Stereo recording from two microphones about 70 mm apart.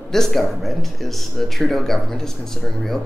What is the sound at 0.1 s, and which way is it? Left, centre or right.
Speech, centre.